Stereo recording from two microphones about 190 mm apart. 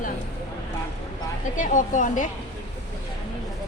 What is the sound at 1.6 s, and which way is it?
Speech, 40° left (ahead or behind).